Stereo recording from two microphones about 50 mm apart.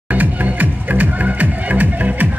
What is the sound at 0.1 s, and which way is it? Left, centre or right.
Music, right.